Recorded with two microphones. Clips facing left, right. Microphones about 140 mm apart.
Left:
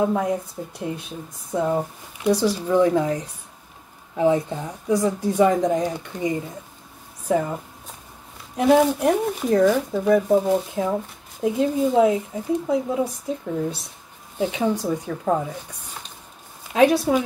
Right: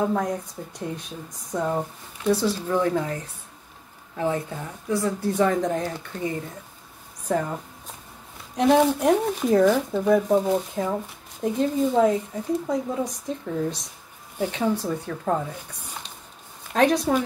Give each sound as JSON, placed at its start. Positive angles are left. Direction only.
{"t": 0.1, "sound": "speech", "side_deg": 10}
{"t": 16.7, "sound": "speech", "side_deg": 5}